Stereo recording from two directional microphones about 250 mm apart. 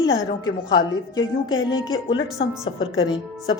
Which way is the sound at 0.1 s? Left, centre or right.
Centre.